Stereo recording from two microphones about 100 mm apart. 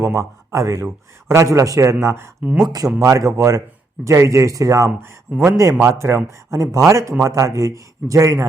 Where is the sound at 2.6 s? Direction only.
40° right (ahead or behind).